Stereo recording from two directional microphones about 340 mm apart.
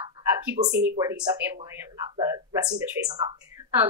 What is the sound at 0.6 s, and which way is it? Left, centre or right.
Speech, right.